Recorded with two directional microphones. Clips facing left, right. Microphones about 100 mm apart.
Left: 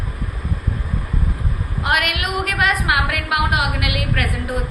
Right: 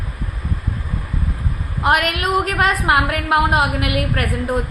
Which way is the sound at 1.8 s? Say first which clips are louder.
Right 4 dB; 35° right (ahead or behind).